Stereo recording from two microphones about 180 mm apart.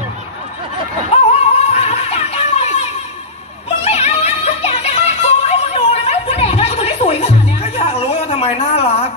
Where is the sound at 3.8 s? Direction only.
35° left (ahead or behind).